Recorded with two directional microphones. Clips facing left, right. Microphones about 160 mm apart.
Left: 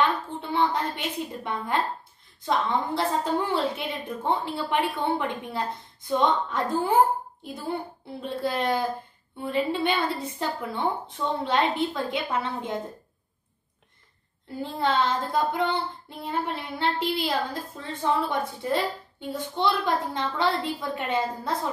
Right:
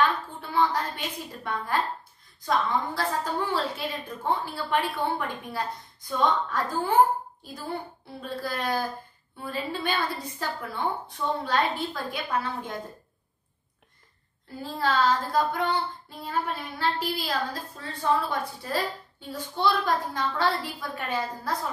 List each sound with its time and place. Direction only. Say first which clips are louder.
0.0 s a woman's voice: left 1 dB; 25° left (ahead or behind)
2.4 s child singing: left 1 dB; 25° left (ahead or behind)
8.2 s child singing: left 4 dB; 25° left (ahead or behind)
14.6 s child singing: left 1 dB; 25° left (ahead or behind)